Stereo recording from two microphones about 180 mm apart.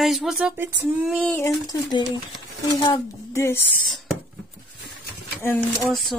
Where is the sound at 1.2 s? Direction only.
5° left (ahead or behind).